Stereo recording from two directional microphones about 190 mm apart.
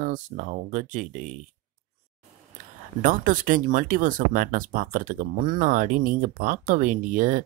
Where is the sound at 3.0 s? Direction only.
45° right (ahead or behind).